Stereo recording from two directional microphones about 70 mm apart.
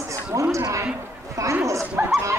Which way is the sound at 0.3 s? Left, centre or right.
Right.